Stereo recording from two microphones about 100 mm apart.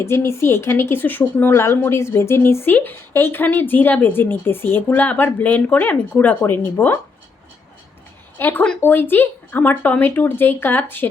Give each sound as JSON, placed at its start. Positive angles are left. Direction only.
{"t": 0.0, "sound": "speech", "side_deg": 25}
{"t": 8.4, "sound": "speech", "side_deg": 20}